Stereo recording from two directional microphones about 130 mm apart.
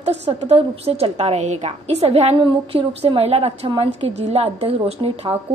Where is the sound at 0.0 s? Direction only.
55° right (ahead or behind).